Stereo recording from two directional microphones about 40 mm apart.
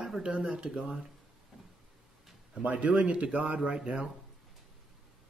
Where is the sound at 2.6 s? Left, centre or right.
Right.